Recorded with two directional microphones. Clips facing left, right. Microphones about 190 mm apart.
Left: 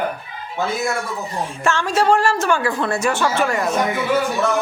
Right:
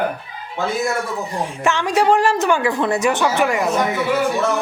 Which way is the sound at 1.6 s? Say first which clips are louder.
Right 1 dB; 15° right (ahead or behind).